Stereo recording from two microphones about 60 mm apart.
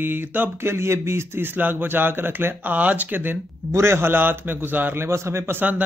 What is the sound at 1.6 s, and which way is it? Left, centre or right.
Speech, right.